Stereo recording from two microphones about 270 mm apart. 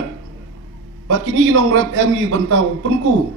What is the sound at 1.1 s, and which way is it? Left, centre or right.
A man's voice, right.